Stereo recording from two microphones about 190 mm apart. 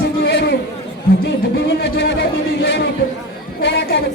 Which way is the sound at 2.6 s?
70° left (ahead or behind).